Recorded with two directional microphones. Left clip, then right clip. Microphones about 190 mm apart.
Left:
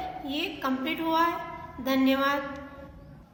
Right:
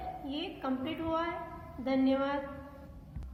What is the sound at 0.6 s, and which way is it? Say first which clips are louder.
A woman's voice: left 5 dB; 30° left (ahead or behind).